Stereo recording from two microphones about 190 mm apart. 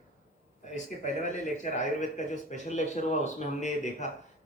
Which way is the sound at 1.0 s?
40° left (ahead or behind).